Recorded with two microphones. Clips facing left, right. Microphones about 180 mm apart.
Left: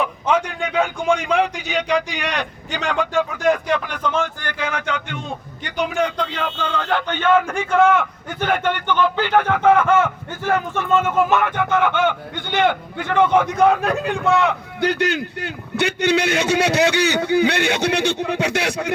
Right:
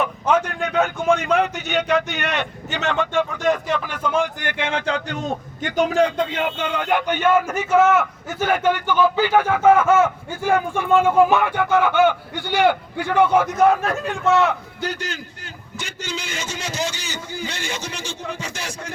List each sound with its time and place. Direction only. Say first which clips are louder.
0.0 s a man's voice: even; 5° right (ahead or behind)
4.4 s a man's voice: right 1 dB; 25° right (ahead or behind); by 14.5 s centre (ahead or behind)
14.8 s a man's voice: left 8 dB; 65° left (ahead or behind)